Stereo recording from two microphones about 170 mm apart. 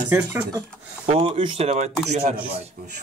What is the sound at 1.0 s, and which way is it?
A man's voice, 35° right (ahead or behind).